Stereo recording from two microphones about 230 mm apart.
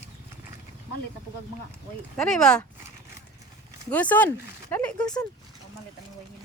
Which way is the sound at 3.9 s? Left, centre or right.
Centre.